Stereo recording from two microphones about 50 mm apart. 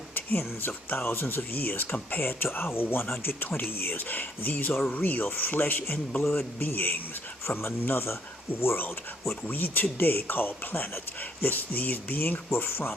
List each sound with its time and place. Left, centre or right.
0.1 s a man's voice: left
7.4 s speech: left
9.5 s a man's voice: left